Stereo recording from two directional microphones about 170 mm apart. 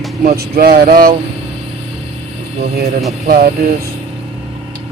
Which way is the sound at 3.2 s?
55° right (ahead or behind).